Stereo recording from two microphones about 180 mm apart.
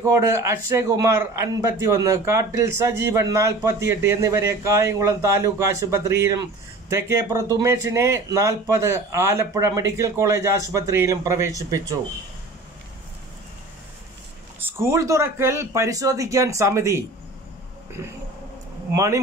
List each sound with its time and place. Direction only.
0.0 s a man's voice: 15° right (ahead or behind)
14.6 s a man's voice: 15° right (ahead or behind)